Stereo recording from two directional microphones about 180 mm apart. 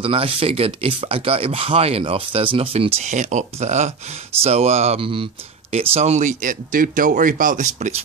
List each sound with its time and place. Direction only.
0.0 s speech: 30° right (ahead or behind)